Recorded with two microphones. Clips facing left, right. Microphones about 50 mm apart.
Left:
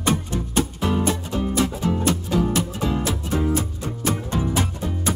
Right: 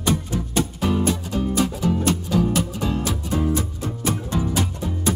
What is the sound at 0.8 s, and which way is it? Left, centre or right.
Music, left.